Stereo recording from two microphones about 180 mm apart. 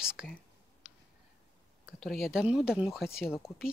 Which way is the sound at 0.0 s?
5° right (ahead or behind).